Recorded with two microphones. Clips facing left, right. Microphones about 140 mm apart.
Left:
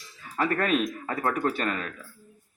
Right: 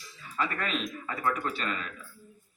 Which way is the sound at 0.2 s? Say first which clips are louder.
Left 6 dB; 50° left (ahead or behind).